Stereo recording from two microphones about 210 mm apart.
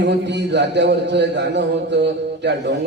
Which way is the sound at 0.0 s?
55° right (ahead or behind).